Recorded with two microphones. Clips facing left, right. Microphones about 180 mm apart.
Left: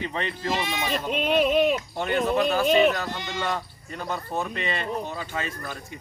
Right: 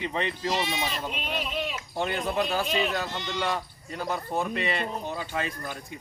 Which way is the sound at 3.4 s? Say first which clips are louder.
Left 1 dB; 5° right (ahead or behind).